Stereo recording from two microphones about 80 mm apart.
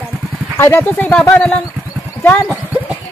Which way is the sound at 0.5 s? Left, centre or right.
Left.